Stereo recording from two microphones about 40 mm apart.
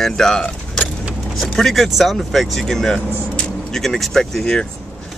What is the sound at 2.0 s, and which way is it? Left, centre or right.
Speech, centre.